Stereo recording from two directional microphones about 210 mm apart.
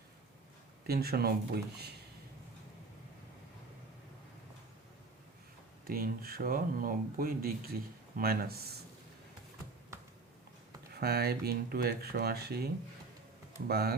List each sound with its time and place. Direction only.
0.9 s speech: 45° right (ahead or behind)
5.8 s speech: 45° right (ahead or behind)
11.0 s speech: 50° right (ahead or behind)